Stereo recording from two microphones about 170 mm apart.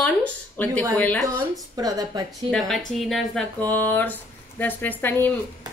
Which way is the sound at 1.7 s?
20° right (ahead or behind).